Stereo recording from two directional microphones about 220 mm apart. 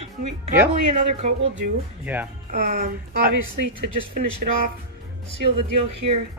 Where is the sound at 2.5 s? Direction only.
35° right (ahead or behind).